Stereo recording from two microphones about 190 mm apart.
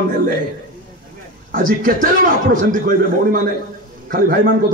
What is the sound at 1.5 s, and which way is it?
Speech, 45° right (ahead or behind).